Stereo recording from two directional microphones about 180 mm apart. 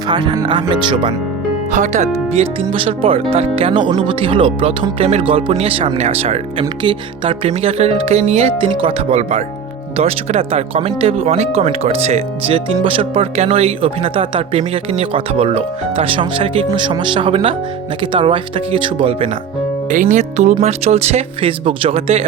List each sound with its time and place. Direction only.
0.1 s speech: 25° right (ahead or behind)
1.7 s speech: 40° right (ahead or behind)
19.9 s speech: 45° right (ahead or behind)